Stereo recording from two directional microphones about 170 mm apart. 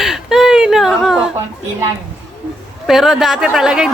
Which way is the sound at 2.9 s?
Centre (ahead or behind).